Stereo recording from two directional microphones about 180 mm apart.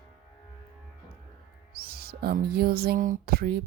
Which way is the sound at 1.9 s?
60° right (ahead or behind).